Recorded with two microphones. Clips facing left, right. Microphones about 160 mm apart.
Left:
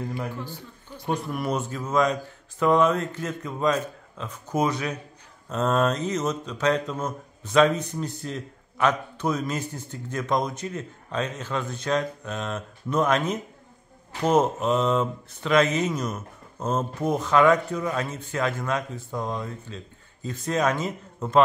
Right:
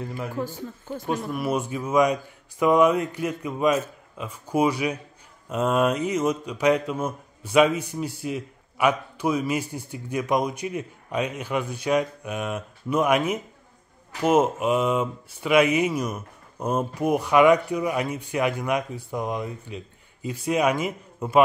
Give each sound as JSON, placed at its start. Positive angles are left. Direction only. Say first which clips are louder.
{"t": 0.4, "sound": "speech", "louder": "right 7 dB", "side_deg": -45}
{"t": 1.0, "sound": "speech", "louder": "even", "side_deg": 0}